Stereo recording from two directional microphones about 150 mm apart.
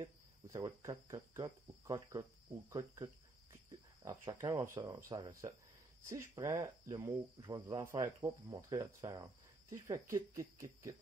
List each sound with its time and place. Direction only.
0.0 s speech: 25° right (ahead or behind)